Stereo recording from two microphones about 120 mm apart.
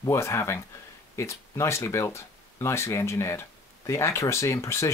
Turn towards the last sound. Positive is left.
turn(degrees=25)  # may be behind; listen again after turning